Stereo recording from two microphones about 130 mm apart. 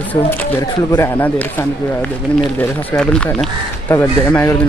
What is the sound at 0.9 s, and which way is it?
Speech, 20° left (ahead or behind).